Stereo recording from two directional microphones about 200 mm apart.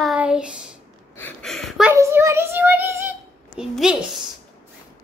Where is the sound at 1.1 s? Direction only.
5° left (ahead or behind).